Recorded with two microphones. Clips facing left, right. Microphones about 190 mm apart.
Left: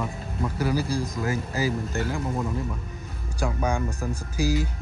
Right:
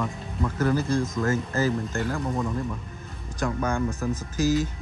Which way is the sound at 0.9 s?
35° left (ahead or behind).